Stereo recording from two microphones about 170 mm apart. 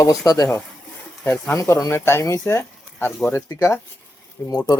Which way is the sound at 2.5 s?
15° left (ahead or behind).